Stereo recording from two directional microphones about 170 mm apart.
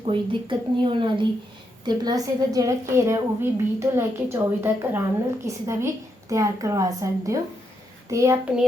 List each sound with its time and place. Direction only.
0.0 s a woman's voice: 30° right (ahead or behind)